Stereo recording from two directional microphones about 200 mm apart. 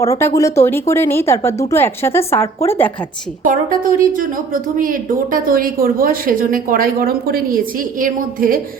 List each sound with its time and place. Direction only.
0.0 s speech: 15° left (ahead or behind)
3.4 s speech: 45° right (ahead or behind)